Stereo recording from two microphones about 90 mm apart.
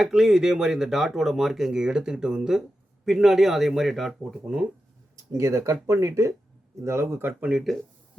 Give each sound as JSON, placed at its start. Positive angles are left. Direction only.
{"t": 0.0, "sound": "speech", "side_deg": -5}
{"t": 5.1, "sound": "speech", "side_deg": -35}